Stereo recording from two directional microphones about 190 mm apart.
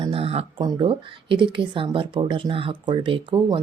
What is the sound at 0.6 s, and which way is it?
Speech, 25° right (ahead or behind).